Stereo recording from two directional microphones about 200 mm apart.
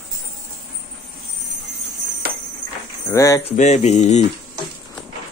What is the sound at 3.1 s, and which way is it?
Speech, 15° left (ahead or behind).